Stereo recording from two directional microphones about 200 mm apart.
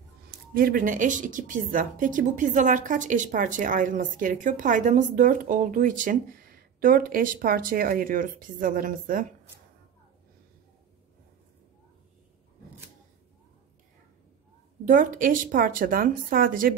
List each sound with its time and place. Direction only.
0.6 s speech: 45° right (ahead or behind)
14.9 s a woman's voice: 40° right (ahead or behind)